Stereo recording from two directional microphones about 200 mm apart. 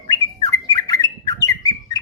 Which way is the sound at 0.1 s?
15° left (ahead or behind).